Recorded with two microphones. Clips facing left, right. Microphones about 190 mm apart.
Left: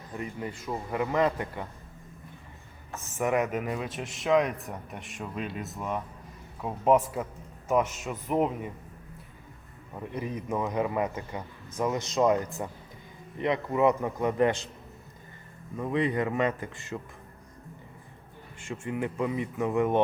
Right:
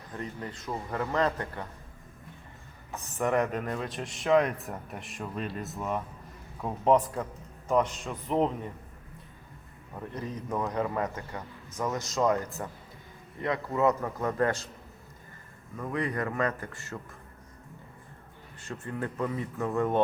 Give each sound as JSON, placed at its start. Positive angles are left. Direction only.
{"t": 0.2, "sound": "a man's voice", "side_deg": 10}
{"t": 3.2, "sound": "a man's voice", "side_deg": 5}
{"t": 9.9, "sound": "a man's voice", "side_deg": 10}
{"t": 15.8, "sound": "a man's voice", "side_deg": 20}
{"t": 18.7, "sound": "a man's voice", "side_deg": 10}